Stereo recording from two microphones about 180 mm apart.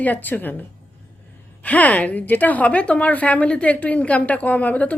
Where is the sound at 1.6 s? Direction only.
10° left (ahead or behind).